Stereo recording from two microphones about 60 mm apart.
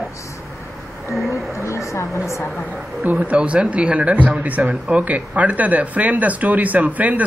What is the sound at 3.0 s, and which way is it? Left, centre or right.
Speech, right.